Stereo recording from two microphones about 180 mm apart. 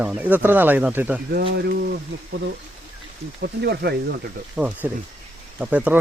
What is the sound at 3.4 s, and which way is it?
Speech, 65° right (ahead or behind).